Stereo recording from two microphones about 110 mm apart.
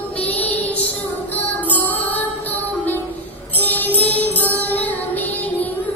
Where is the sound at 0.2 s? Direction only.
15° left (ahead or behind).